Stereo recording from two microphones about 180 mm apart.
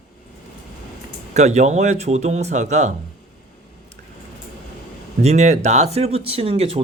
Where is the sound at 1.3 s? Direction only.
40° right (ahead or behind).